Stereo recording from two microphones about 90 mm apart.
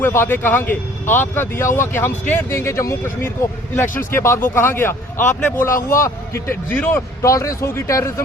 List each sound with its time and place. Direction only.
0.0 s speech: 25° left (ahead or behind)
5.4 s speech: 15° left (ahead or behind)
5.6 s speech: 30° left (ahead or behind)
7.2 s speech: 35° left (ahead or behind)